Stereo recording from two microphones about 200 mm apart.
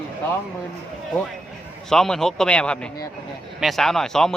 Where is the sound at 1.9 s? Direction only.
5° left (ahead or behind).